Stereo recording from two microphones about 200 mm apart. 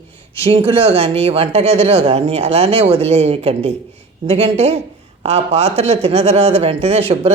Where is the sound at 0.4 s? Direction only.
30° right (ahead or behind).